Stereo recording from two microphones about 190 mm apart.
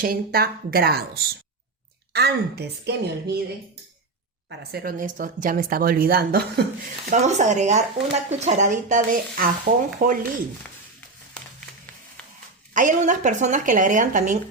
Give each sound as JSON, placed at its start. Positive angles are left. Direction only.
{"t": 0.0, "sound": "speech", "side_deg": -50}
{"t": 4.4, "sound": "speech", "side_deg": -55}
{"t": 7.1, "sound": "speech", "side_deg": -40}
{"t": 12.7, "sound": "speech", "side_deg": -40}